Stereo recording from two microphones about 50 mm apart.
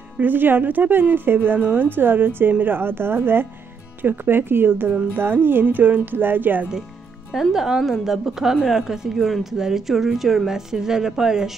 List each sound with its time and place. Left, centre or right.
0.2 s speech: right
1.6 s a woman's voice: right
1.9 s speech: right
7.5 s a woman's voice: centre